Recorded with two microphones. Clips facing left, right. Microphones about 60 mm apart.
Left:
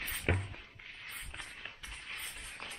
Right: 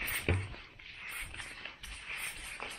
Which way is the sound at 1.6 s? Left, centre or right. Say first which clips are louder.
Even; centre.